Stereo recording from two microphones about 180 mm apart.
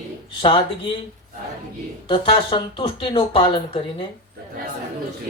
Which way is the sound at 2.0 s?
30° left (ahead or behind).